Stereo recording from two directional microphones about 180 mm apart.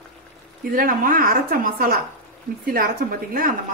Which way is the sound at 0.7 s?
50° right (ahead or behind).